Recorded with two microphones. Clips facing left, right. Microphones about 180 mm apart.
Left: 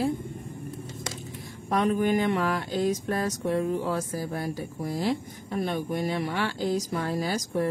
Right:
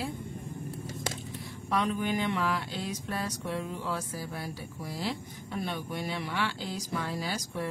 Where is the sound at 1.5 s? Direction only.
45° left (ahead or behind).